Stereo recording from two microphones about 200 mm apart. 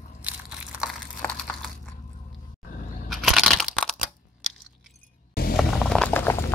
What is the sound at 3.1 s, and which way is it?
Crushing, centre (ahead or behind).